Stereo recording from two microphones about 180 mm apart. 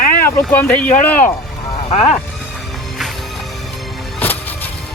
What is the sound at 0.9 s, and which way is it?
Speech, 45° left (ahead or behind).